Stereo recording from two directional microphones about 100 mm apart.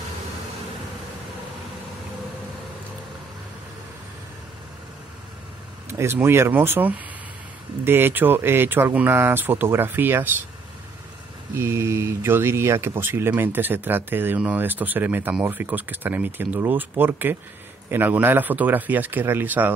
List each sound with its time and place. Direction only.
5.9 s vehicle: 25° right (ahead or behind)
6.2 s speech: 25° right (ahead or behind)
11.5 s speech: 25° right (ahead or behind)